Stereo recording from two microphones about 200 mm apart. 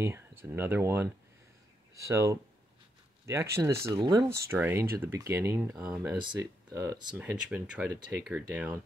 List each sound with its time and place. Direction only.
0.4 s speech: 10° right (ahead or behind)
7.2 s speech: 5° right (ahead or behind)